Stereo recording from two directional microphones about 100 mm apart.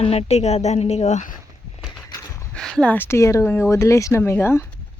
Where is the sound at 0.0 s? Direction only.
85° left.